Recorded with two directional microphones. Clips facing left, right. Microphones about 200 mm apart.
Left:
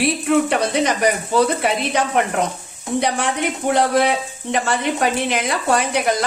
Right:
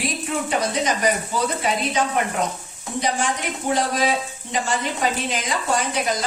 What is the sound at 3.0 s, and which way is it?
Speech, 65° left (ahead or behind).